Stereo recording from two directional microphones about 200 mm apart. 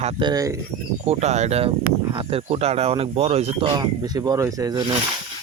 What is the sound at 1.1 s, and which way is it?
Speech, 35° right (ahead or behind).